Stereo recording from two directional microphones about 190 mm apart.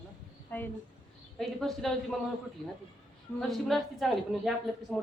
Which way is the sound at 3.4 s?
Centre (ahead or behind).